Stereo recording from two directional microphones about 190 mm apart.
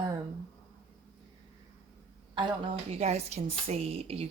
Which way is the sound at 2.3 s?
30° right (ahead or behind).